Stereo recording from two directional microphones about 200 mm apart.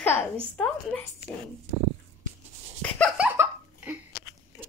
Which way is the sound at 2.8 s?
5° left (ahead or behind).